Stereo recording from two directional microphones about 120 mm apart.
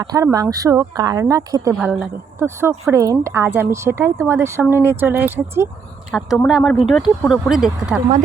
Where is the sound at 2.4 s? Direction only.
20° right (ahead or behind).